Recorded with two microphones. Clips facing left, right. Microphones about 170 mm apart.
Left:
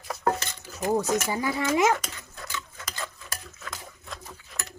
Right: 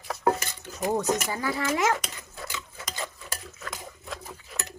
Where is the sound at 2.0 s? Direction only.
5° right (ahead or behind).